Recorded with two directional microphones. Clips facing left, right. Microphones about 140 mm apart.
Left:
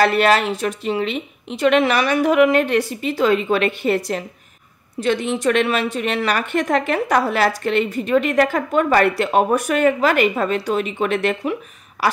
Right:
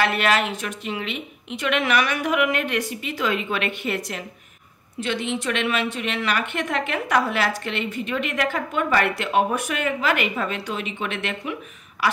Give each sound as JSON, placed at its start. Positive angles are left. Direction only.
{"t": 0.0, "sound": "a woman's voice", "side_deg": 35}